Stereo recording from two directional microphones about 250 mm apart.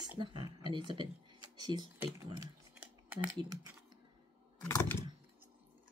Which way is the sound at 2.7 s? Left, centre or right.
Centre.